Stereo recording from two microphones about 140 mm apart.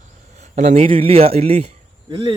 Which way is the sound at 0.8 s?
40° right (ahead or behind).